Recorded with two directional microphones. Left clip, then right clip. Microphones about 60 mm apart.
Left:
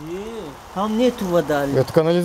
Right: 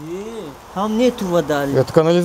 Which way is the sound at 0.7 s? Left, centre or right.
Right.